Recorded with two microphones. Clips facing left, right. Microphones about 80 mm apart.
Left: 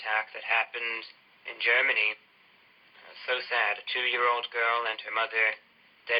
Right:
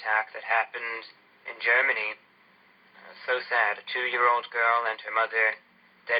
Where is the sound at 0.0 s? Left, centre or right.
Right.